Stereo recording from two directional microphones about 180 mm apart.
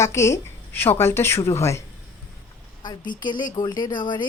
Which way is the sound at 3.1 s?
25° left (ahead or behind).